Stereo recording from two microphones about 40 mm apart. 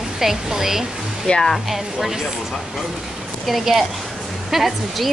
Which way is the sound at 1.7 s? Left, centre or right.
Centre.